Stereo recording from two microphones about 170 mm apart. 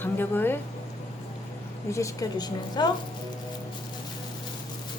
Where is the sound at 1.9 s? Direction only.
20° left (ahead or behind).